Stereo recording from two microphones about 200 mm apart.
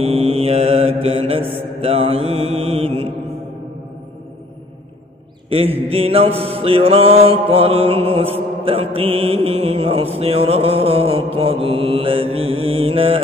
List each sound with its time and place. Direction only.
0.0 s mantra: 30° right (ahead or behind)
5.5 s mantra: 30° right (ahead or behind)